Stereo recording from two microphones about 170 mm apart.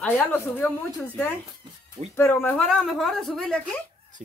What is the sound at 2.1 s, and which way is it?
A woman's voice, 15° left (ahead or behind).